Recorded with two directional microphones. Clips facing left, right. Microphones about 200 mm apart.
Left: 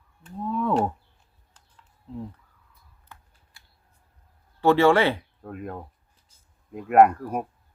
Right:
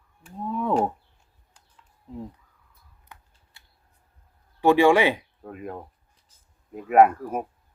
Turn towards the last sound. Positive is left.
turn(degrees=-5)  # may be behind; listen again after turning